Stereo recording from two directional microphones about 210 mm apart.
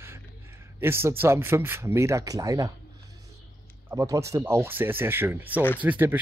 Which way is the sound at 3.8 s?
15° right (ahead or behind).